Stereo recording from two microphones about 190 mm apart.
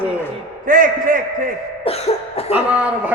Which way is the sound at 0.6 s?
45° right (ahead or behind).